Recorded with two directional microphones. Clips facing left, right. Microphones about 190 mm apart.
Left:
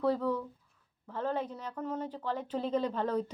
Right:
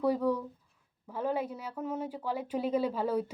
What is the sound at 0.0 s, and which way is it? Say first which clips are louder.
A woman's voice: right 2 dB; 10° right (ahead or behind).